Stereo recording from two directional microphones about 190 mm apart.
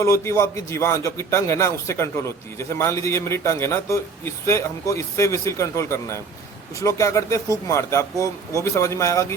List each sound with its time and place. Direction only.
0.0 s a man's voice: 15° left (ahead or behind)